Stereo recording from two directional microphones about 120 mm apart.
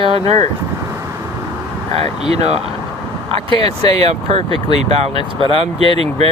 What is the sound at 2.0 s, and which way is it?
Speech, 55° right (ahead or behind).